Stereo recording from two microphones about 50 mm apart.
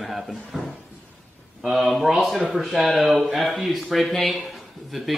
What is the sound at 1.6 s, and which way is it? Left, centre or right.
A man's voice, centre.